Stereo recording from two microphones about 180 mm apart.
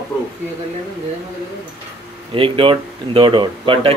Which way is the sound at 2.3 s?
30° right (ahead or behind).